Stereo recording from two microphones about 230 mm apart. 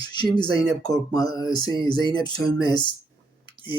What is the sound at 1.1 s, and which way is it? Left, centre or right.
Speech, centre.